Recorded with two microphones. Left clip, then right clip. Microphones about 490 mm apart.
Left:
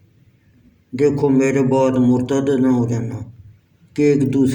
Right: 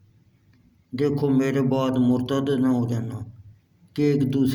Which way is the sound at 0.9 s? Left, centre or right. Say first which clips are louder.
Left 7 dB; right.